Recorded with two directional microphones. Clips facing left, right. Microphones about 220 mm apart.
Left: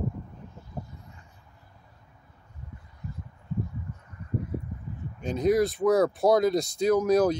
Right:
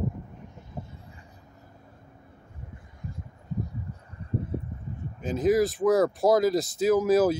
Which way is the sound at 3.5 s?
40° right (ahead or behind).